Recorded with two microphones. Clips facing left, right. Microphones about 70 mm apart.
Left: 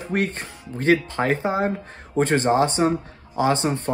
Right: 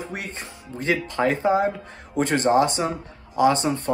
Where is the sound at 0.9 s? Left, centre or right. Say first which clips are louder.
Left 1 dB; left.